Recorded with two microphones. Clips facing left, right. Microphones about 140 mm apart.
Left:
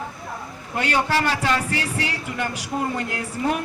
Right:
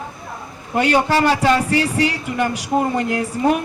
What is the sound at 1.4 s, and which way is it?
Speech, 40° right (ahead or behind).